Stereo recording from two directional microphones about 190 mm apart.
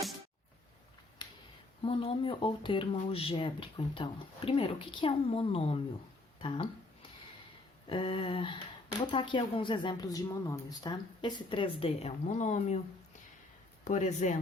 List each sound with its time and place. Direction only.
1.2 s a sound: 25° left (ahead or behind)
1.8 s speech: 30° left (ahead or behind)
7.9 s speech: 25° left (ahead or behind)
13.8 s speech: 40° left (ahead or behind)